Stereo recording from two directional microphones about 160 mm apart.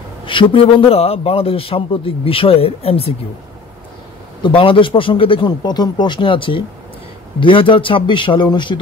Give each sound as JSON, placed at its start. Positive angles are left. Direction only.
{"t": 0.2, "sound": "a man's voice", "side_deg": 35}
{"t": 4.4, "sound": "a man's voice", "side_deg": 30}